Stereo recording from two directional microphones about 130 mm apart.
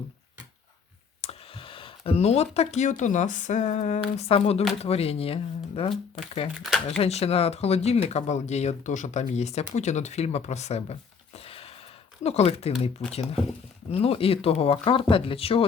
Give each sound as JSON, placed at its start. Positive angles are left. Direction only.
{"t": 1.2, "sound": "speech", "side_deg": 50}
{"t": 4.3, "sound": "speech", "side_deg": 50}
{"t": 6.6, "sound": "speech", "side_deg": 0}
{"t": 7.0, "sound": "speech", "side_deg": 50}